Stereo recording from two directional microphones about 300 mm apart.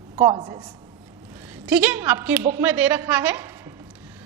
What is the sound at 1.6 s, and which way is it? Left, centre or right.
A woman's voice, centre.